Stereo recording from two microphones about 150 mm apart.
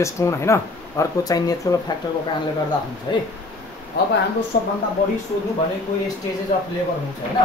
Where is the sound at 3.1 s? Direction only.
30° left (ahead or behind).